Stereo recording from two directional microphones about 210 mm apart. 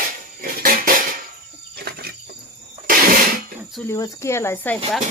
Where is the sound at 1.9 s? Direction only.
50° right (ahead or behind).